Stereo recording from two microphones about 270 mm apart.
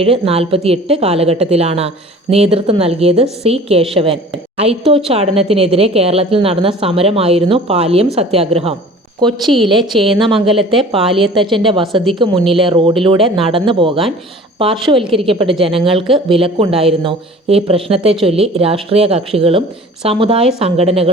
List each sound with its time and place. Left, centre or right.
0.0 s a woman's voice: right
9.4 s a woman's voice: centre
10.2 s a woman's voice: centre
15.3 s a woman's voice: centre